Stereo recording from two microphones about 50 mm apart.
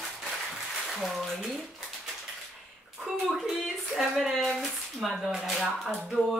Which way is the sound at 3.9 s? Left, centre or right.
Centre.